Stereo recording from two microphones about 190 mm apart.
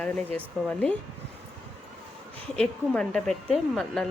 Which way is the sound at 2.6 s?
5° left (ahead or behind).